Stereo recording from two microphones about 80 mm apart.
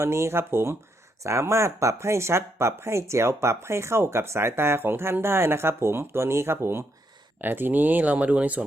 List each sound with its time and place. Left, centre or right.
0.0 s speech: right; by 8.6 s centre